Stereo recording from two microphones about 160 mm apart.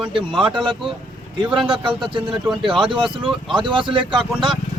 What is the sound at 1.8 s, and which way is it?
Speech, 30° right (ahead or behind).